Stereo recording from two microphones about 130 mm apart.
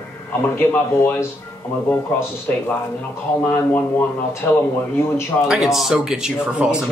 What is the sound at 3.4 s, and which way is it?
Speech, 15° left (ahead or behind).